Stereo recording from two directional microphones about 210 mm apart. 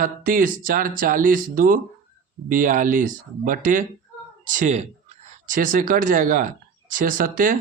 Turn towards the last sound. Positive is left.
turn(degrees=-40)  # may be behind; listen again after turning